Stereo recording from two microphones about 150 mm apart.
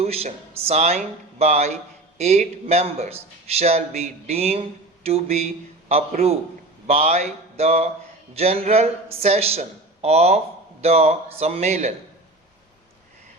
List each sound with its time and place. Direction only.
0.0 s speech: 45° right (ahead or behind)